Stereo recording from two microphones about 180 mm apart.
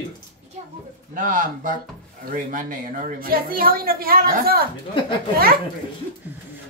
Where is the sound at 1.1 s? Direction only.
45° right (ahead or behind).